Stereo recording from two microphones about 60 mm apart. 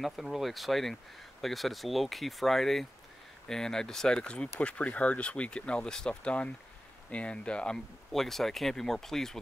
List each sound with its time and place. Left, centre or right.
0.0 s speech: centre
8.1 s speech: centre